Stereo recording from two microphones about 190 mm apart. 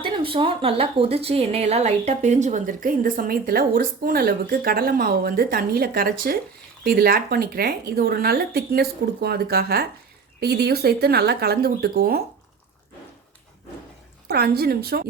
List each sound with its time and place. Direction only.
0.0 s a woman's voice: 25° right (ahead or behind); by 12.2 s 55° right (ahead or behind)
14.3 s a woman's voice: 55° right (ahead or behind)